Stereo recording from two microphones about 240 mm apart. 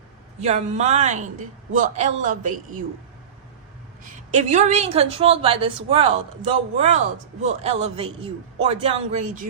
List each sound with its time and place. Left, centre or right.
0.3 s a man's voice: right
4.0 s a woman's voice: right